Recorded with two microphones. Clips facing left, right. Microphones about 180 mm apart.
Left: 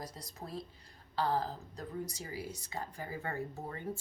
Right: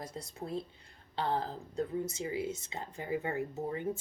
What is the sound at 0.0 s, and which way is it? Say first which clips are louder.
Speech: right 4 dB; 25° right (ahead or behind).